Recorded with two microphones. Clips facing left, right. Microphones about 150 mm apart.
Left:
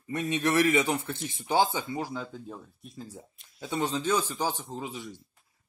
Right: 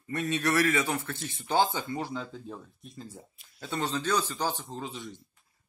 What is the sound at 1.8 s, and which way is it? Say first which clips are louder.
A man's voice: even; 5° left (ahead or behind).